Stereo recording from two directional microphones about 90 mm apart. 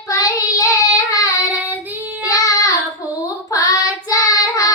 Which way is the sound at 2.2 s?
40° left (ahead or behind).